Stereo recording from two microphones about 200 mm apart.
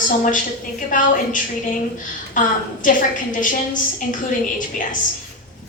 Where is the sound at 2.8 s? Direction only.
40° left (ahead or behind).